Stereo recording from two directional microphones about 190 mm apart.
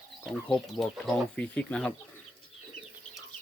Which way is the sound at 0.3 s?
5° left (ahead or behind).